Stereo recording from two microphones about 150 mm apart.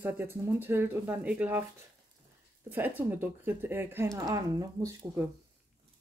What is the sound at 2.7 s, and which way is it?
Speech, 10° right (ahead or behind).